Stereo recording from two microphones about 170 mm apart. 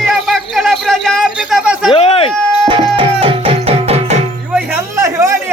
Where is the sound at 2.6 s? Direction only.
30° right (ahead or behind).